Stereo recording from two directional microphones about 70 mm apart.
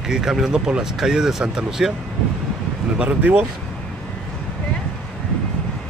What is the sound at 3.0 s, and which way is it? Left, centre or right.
Speech, right.